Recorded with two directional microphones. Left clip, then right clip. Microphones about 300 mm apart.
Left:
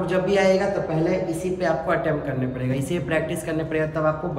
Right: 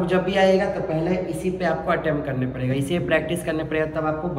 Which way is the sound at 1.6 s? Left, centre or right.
Centre.